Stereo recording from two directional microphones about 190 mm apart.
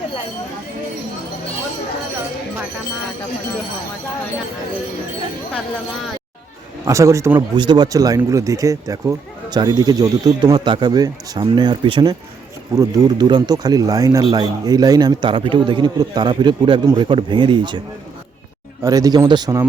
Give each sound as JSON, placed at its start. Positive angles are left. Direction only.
{"t": 6.8, "sound": "a man's voice", "side_deg": -15}
{"t": 18.8, "sound": "speech", "side_deg": -20}